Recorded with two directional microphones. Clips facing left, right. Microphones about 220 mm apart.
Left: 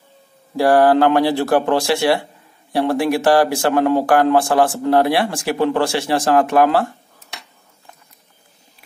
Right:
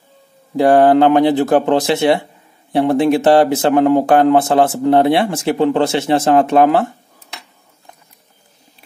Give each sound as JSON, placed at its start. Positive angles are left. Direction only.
{"t": 0.6, "sound": "speech", "side_deg": -20}